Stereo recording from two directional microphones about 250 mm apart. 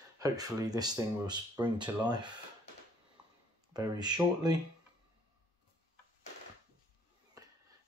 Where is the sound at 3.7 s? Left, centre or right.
Centre.